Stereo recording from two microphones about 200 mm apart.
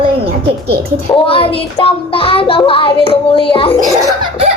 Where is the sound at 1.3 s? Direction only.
25° left (ahead or behind).